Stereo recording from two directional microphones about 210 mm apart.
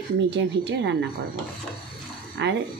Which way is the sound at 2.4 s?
55° right (ahead or behind).